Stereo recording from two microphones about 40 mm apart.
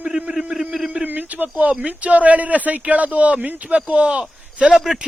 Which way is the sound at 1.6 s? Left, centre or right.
Right.